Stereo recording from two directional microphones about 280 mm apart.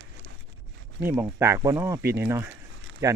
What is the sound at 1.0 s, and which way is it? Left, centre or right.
Speech, centre.